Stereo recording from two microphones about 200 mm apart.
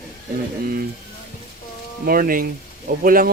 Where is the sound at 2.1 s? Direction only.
45° right (ahead or behind).